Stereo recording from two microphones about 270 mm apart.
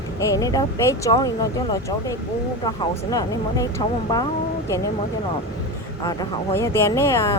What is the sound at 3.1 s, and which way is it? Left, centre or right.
Speech, centre.